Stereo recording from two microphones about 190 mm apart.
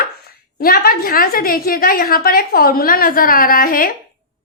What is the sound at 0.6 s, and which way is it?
A woman's voice, 50° left (ahead or behind).